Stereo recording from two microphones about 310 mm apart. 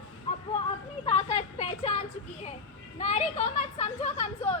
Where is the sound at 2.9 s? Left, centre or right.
Left.